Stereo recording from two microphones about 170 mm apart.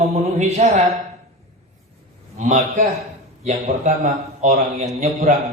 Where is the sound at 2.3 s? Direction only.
45° right (ahead or behind).